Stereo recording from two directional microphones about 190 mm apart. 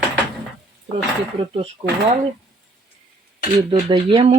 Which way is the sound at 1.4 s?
30° right (ahead or behind).